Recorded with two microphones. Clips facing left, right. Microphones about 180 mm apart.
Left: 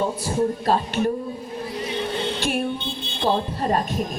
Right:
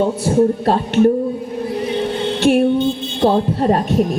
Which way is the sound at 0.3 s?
60° right (ahead or behind).